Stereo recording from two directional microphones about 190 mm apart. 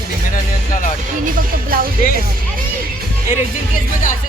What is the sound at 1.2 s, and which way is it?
Music, 45° right (ahead or behind).